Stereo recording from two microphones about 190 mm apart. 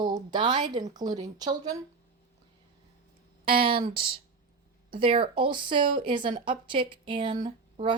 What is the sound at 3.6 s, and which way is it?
Speech, 30° right (ahead or behind).